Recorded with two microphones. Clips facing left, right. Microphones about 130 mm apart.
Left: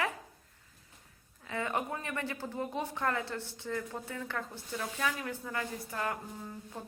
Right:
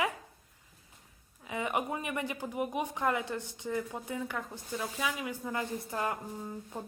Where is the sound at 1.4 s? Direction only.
15° right (ahead or behind).